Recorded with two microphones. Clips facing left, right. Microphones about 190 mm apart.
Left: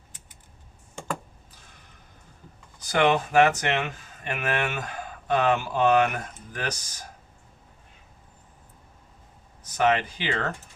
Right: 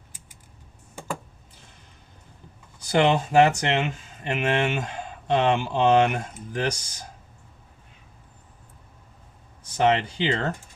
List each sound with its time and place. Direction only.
0.9 s computer keyboard: 10° right (ahead or behind)
2.7 s speech: 25° right (ahead or behind)
9.7 s speech: 25° right (ahead or behind)